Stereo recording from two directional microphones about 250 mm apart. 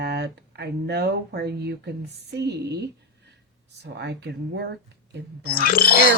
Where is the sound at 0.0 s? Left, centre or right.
Right.